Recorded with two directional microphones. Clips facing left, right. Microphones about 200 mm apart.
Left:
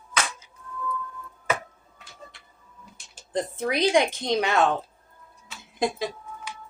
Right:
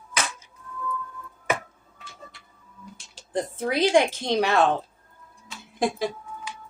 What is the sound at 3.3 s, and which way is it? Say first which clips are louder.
A woman's voice: right 1 dB; 20° left (ahead or behind).